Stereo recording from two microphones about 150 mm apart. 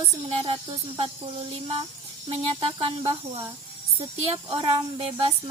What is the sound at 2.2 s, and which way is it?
Speech, 35° right (ahead or behind).